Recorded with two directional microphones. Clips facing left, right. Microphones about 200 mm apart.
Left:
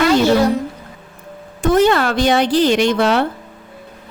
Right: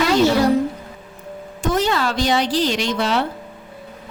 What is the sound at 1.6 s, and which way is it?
Speech, 55° left (ahead or behind).